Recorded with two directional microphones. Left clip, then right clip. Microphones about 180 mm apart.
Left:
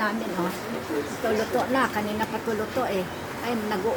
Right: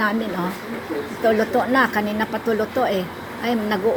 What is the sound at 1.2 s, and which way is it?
Speech, 25° right (ahead or behind).